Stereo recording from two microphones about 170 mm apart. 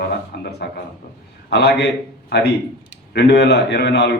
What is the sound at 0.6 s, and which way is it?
A man's voice, 90° left.